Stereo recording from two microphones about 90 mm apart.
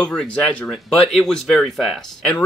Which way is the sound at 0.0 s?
10° left (ahead or behind).